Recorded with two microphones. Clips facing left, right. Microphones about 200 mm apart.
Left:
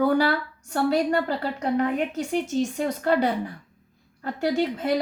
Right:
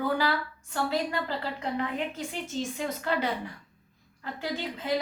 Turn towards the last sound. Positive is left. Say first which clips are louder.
# left 10 dB
turn(degrees=45)  # may be behind; listen again after turning